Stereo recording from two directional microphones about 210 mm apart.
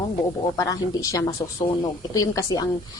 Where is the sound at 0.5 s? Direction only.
15° left (ahead or behind).